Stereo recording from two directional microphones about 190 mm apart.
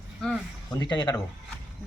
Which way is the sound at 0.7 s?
20° left (ahead or behind).